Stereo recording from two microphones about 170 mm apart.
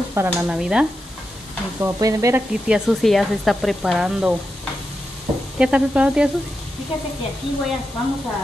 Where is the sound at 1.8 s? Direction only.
20° right (ahead or behind).